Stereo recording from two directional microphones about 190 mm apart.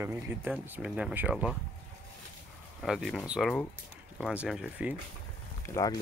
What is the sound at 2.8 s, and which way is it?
Speech, centre (ahead or behind).